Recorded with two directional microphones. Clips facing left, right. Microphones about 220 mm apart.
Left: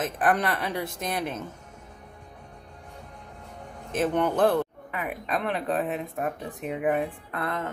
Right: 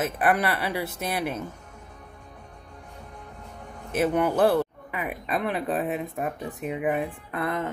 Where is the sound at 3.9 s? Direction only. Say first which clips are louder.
Right 2 dB; 10° right (ahead or behind).